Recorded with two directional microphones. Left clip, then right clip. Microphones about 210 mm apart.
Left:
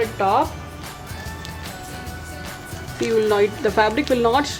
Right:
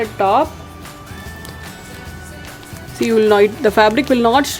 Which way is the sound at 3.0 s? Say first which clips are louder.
Right 6 dB; 50° right (ahead or behind).